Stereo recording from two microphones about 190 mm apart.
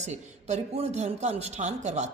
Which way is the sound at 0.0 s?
40° right (ahead or behind).